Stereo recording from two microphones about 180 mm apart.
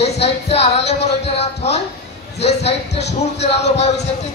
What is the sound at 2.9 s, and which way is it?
Speech, 70° left (ahead or behind).